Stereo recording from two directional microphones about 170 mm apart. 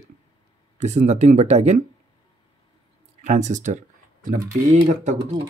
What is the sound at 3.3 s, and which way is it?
Speech, 45° right (ahead or behind).